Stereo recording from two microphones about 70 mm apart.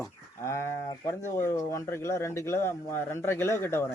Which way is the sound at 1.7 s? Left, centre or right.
Left.